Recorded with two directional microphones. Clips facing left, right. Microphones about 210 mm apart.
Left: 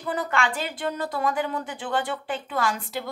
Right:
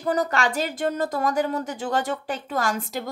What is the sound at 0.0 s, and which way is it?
A woman's voice, 40° right (ahead or behind).